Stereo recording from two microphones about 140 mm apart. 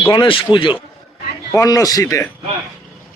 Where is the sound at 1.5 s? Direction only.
25° left (ahead or behind).